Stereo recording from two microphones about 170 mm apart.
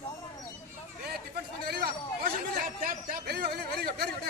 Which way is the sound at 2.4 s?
55° right (ahead or behind).